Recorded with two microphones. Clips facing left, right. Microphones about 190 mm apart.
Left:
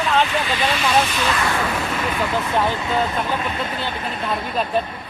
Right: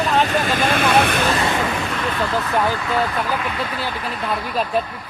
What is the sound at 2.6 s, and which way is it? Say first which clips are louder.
Speech: even; 20° left (ahead or behind).